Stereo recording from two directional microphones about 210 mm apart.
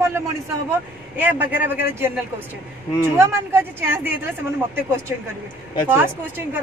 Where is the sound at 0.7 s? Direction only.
10° right (ahead or behind).